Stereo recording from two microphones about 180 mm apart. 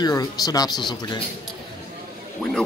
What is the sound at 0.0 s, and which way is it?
Speech, 20° left (ahead or behind).